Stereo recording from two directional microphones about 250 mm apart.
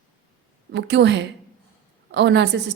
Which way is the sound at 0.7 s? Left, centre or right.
Right.